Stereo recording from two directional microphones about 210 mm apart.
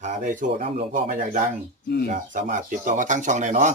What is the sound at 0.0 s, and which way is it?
Speech, 35° right (ahead or behind).